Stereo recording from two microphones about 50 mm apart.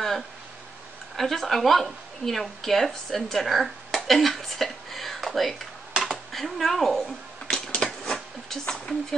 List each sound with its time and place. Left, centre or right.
1.1 s a woman's voice: centre
6.3 s typewriter: centre